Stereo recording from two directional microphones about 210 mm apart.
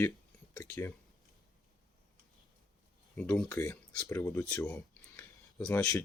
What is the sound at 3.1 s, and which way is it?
Speech, 5° left (ahead or behind).